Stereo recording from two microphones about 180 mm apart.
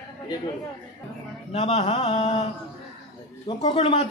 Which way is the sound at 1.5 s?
35° left (ahead or behind).